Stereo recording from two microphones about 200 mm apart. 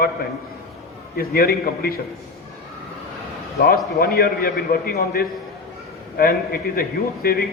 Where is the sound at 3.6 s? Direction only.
50° left (ahead or behind).